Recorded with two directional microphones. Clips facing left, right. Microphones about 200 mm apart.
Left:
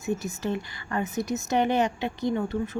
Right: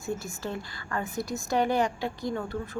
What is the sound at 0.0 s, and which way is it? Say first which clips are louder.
Speech: left 4 dB; 20° left (ahead or behind).